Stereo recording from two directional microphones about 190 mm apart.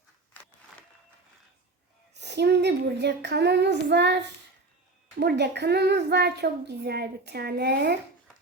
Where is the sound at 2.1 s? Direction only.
60° right (ahead or behind).